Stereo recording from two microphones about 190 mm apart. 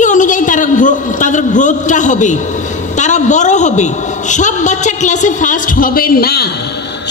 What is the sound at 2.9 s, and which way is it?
A man's voice, 40° left (ahead or behind).